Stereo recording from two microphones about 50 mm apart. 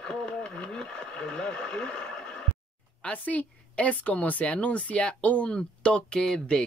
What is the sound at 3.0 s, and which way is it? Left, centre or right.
Speech, left.